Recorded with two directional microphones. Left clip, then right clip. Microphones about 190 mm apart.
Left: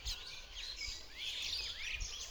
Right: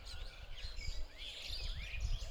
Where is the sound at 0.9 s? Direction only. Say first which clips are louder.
Left 6 dB; 60° right (ahead or behind).